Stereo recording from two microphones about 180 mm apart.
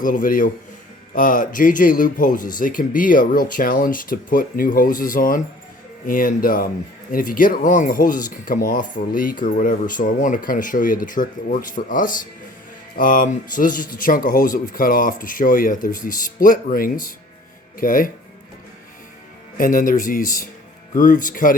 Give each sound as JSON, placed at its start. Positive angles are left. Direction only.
{"t": 0.0, "sound": "speech", "side_deg": 50}
{"t": 19.5, "sound": "speech", "side_deg": 50}